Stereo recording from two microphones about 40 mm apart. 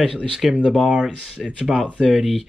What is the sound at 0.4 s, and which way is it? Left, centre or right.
Speech, centre.